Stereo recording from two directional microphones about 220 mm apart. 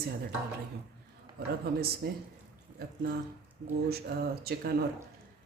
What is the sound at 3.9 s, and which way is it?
Speech, 45° right (ahead or behind).